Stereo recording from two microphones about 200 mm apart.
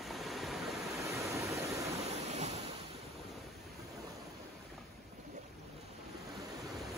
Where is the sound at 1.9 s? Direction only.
35° right (ahead or behind).